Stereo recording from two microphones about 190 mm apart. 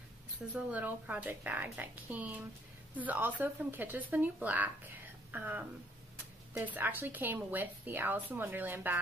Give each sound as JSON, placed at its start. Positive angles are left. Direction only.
{"t": 0.7, "sound": "speech", "side_deg": -5}